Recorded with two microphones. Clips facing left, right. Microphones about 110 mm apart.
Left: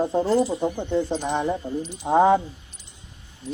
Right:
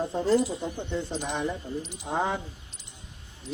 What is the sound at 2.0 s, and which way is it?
Speech, 40° left (ahead or behind).